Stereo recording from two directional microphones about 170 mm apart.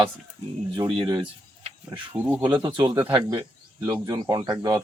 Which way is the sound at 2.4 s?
25° right (ahead or behind).